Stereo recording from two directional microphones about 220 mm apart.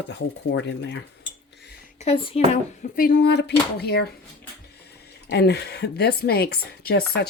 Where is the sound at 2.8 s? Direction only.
40° left (ahead or behind).